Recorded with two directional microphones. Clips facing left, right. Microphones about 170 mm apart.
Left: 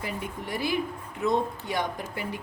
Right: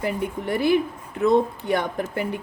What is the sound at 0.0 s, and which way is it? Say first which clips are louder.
A woman's voice: right 8 dB; 60° right (ahead or behind).